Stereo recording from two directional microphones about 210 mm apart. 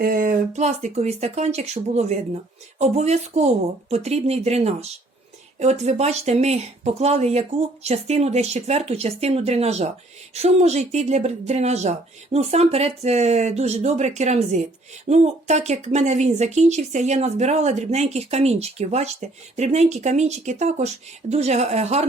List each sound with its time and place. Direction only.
0.0 s speech: 40° right (ahead or behind)